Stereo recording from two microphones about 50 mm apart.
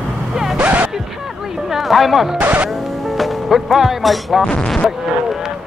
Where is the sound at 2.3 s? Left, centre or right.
Right.